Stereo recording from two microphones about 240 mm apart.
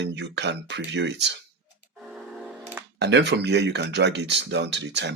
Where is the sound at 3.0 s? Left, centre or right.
Right.